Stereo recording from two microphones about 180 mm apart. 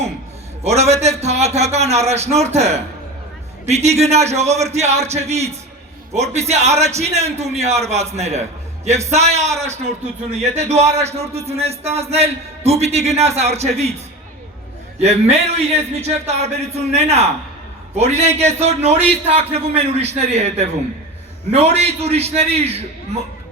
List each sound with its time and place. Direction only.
0.6 s a man's voice: 35° right (ahead or behind)
15.0 s a man's voice: 35° right (ahead or behind)